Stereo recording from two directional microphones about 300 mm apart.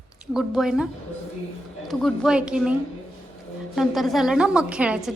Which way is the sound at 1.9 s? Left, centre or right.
Centre.